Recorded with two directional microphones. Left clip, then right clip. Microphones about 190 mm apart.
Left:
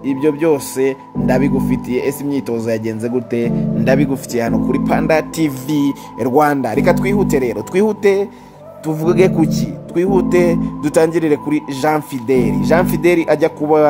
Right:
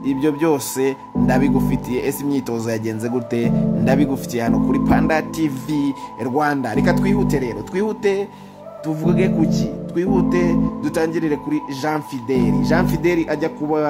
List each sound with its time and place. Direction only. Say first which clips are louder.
0.0 s speech: left 3 dB; 10° left (ahead or behind)
5.7 s a man's voice: left 4 dB; 35° left (ahead or behind)
8.8 s a man's voice: left 6 dB; 40° left (ahead or behind)